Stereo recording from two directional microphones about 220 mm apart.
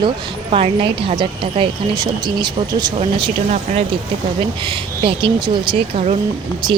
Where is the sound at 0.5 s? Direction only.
25° right (ahead or behind).